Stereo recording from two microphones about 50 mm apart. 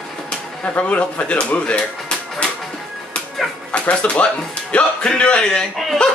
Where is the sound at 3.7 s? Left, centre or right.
Left.